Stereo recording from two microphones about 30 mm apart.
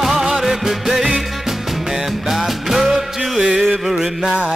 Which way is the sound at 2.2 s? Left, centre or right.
Centre.